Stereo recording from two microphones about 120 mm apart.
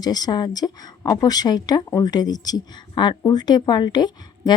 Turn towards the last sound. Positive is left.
turn(degrees=35)  # may be behind; listen again after turning